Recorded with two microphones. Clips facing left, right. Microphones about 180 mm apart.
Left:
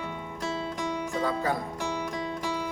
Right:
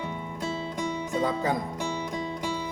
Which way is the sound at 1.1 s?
20° right (ahead or behind).